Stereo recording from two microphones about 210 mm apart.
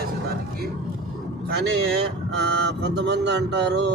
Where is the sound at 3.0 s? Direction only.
55° right (ahead or behind).